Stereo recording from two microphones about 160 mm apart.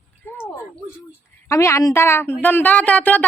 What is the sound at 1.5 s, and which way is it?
Speech, 20° left (ahead or behind).